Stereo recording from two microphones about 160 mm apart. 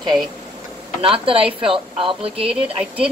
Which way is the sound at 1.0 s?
35° right (ahead or behind).